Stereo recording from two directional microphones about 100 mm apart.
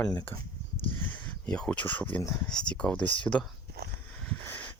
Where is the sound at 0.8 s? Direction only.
20° left (ahead or behind).